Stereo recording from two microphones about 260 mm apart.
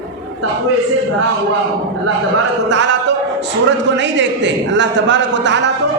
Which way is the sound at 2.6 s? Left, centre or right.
Right.